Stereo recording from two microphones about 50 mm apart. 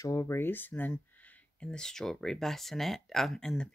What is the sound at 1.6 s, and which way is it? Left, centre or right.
Speech, centre.